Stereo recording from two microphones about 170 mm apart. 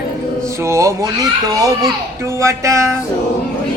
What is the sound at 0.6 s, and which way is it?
Speech, 15° right (ahead or behind).